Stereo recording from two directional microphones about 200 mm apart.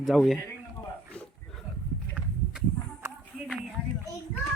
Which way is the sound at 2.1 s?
5° right (ahead or behind).